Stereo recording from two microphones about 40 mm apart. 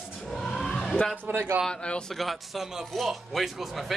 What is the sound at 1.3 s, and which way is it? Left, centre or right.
Speech, right.